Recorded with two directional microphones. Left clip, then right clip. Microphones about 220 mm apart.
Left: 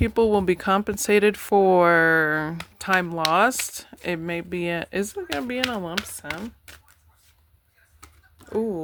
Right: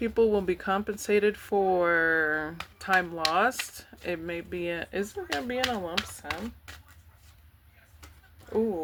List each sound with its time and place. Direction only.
0.0 s speech: 35° left (ahead or behind)